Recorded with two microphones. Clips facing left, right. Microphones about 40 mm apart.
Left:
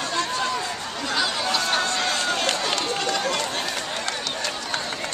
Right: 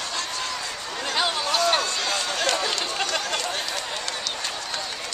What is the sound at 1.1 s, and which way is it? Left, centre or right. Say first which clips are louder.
Chatter: even; right.